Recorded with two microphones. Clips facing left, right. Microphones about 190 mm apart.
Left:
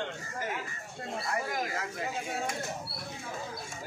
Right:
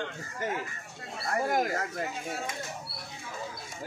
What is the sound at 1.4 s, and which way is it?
Speech, 55° right (ahead or behind).